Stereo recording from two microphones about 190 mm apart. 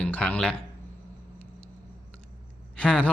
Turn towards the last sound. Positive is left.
turn(degrees=5)  # may be behind; listen again after turning